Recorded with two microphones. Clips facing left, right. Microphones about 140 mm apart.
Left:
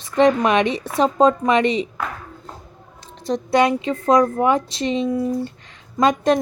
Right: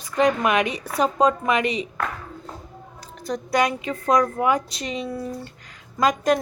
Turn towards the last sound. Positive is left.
turn(degrees=25)  # may be behind; listen again after turning